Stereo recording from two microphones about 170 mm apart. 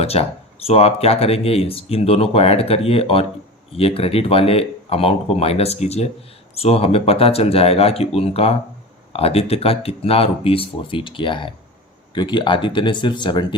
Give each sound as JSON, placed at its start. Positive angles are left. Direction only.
{"t": 0.0, "sound": "speech", "side_deg": 35}